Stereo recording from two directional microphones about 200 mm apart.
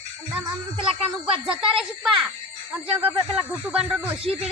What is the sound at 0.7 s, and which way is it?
Child singing, 25° right (ahead or behind).